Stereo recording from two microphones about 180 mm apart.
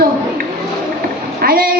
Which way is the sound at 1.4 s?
60° right (ahead or behind).